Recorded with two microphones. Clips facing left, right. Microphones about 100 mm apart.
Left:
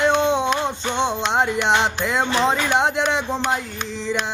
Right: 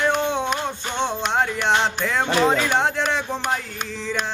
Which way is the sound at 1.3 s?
20° left (ahead or behind).